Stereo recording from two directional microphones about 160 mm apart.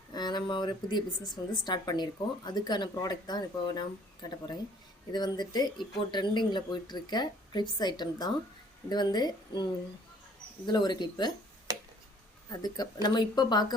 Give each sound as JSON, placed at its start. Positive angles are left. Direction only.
{"t": 0.1, "sound": "a woman's voice", "side_deg": 25}
{"t": 10.7, "sound": "a woman's voice", "side_deg": 25}
{"t": 11.7, "sound": "a sound", "side_deg": -25}
{"t": 12.5, "sound": "a woman's voice", "side_deg": 25}